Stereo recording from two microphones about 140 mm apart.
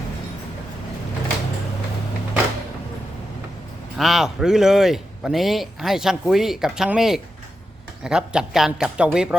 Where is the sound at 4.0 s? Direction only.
Centre (ahead or behind).